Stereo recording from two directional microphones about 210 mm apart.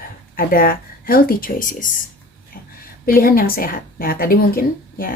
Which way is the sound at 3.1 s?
45° left (ahead or behind).